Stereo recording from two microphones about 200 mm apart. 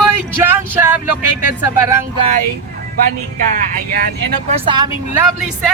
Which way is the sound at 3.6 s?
40° right (ahead or behind).